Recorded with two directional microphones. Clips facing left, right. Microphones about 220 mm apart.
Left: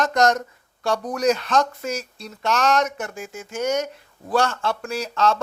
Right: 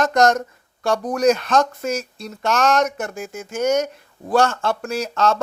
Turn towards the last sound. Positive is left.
turn(degrees=-45)  # may be behind; listen again after turning